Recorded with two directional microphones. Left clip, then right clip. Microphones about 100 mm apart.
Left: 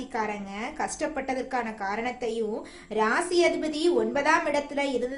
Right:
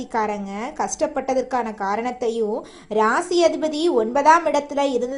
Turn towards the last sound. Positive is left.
turn(degrees=-50)  # may be behind; listen again after turning